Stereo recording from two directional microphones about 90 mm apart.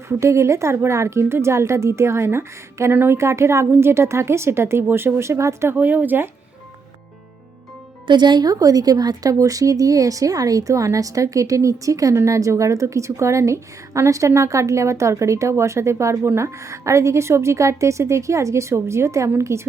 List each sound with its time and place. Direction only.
0.1 s speech: 35° right (ahead or behind)
5.7 s speech: 20° right (ahead or behind)
8.0 s speech: 55° right (ahead or behind); by 19.6 s 30° right (ahead or behind)